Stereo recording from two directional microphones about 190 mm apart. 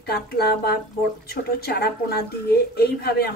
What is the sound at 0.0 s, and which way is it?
A woman's voice, 55° left (ahead or behind).